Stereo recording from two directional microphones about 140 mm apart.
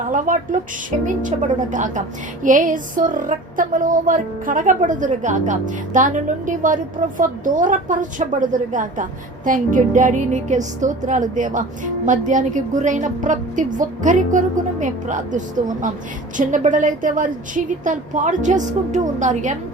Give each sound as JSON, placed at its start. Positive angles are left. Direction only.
{"t": 0.1, "sound": "speech", "side_deg": -70}